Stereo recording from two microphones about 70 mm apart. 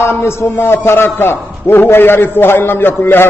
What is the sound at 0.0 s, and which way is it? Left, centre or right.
A man's voice, left.